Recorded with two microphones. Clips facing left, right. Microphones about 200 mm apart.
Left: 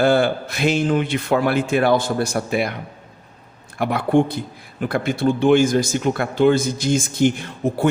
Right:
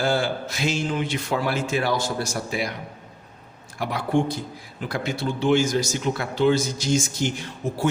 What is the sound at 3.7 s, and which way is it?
A man's voice, 55° left (ahead or behind).